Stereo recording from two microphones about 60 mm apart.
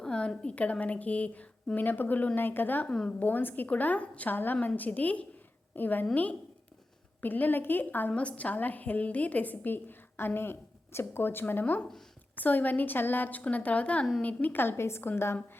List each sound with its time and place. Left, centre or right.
0.0 s a woman's voice: centre; by 2.8 s left
2.8 s a woman's voice: centre
3.1 s a woman's voice: left
7.2 s a woman's voice: left
11.6 s a woman's voice: left